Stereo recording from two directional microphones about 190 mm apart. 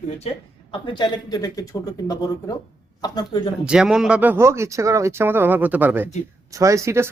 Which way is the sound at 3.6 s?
5° right (ahead or behind).